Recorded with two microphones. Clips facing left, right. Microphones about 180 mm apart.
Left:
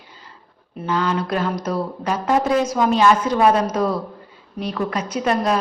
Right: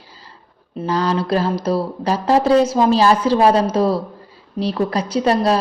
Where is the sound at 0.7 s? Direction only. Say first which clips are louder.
Right 2 dB; 30° right (ahead or behind).